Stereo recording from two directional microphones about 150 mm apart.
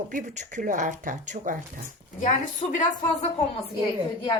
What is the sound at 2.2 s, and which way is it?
Speech, 55° left (ahead or behind).